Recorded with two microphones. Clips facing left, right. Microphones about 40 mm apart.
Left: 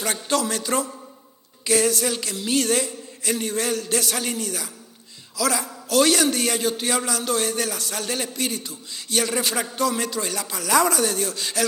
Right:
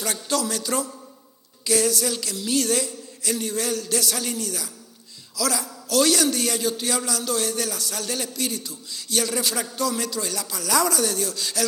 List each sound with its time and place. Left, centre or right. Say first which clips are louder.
0.0 s a man's voice: left 2 dB; left